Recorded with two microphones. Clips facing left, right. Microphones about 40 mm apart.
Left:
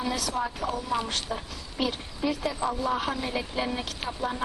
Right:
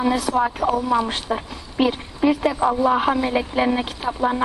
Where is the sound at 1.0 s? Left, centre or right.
Right.